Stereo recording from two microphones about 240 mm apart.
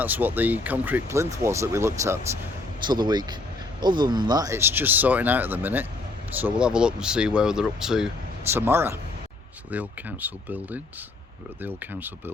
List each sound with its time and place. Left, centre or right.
0.0 s speech: centre